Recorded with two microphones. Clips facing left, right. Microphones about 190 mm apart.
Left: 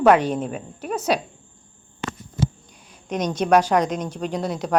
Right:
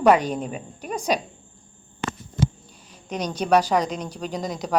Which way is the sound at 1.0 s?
10° right (ahead or behind).